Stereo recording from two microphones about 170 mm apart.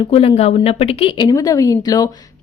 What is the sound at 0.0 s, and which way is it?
Speech, 35° left (ahead or behind).